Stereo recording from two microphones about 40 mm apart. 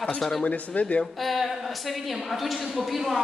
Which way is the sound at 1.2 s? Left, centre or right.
Centre.